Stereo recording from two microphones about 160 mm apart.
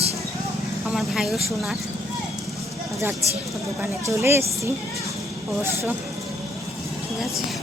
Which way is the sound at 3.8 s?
15° right (ahead or behind).